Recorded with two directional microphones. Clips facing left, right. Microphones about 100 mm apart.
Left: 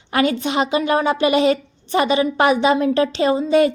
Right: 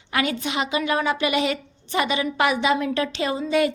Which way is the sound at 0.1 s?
35° left (ahead or behind).